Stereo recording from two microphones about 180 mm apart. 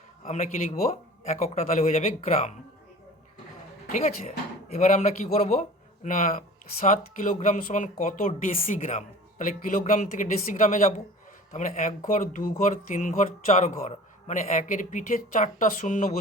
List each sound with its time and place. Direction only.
0.3 s a man's voice: 35° left (ahead or behind)
4.7 s a man's voice: 40° left (ahead or behind)